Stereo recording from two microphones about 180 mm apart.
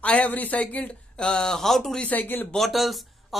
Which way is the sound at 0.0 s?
5° left (ahead or behind).